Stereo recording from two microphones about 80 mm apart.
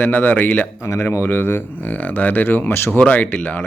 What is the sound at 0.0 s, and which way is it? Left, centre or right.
Speech, left.